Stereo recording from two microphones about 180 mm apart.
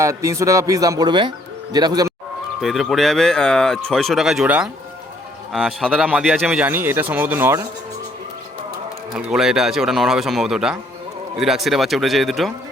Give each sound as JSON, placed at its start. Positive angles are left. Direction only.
{"t": 0.0, "sound": "speech", "side_deg": -15}
{"t": 2.6, "sound": "speech", "side_deg": 0}
{"t": 9.1, "sound": "speech", "side_deg": -5}